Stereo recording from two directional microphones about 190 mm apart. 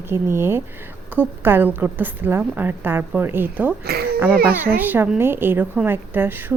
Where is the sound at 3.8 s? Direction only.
55° right (ahead or behind).